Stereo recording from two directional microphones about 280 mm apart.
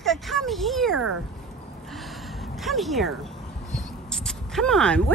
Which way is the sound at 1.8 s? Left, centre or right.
Centre.